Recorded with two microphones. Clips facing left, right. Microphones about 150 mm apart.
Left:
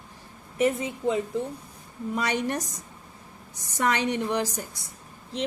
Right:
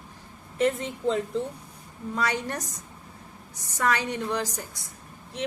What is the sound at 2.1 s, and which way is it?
Speech, 20° left (ahead or behind).